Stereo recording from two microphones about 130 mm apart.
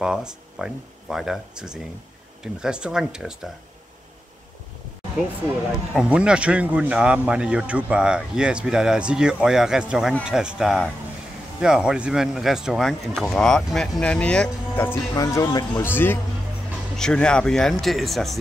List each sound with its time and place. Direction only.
0.0 s speech: 5° right (ahead or behind)
5.9 s a man's voice: 10° right (ahead or behind); by 14.9 s 10° left (ahead or behind)
15.1 s speech: 30° left (ahead or behind)
15.8 s a man's voice: 15° left (ahead or behind)
16.9 s speech: 5° left (ahead or behind)